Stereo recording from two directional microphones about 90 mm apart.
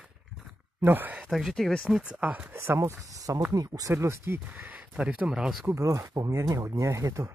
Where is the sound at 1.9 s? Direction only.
15° right (ahead or behind).